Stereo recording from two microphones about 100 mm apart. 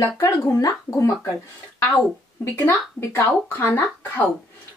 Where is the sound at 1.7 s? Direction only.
15° left (ahead or behind).